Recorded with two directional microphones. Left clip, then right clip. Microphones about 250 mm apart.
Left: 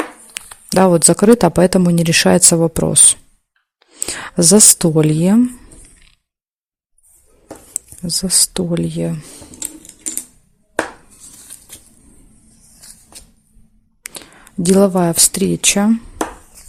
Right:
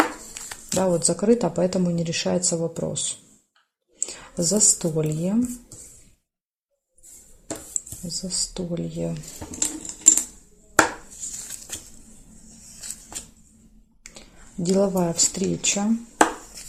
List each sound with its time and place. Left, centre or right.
0.4 s a sound: left
0.7 s speech: left
4.0 s speech: left
7.7 s speech: left
14.0 s speech: left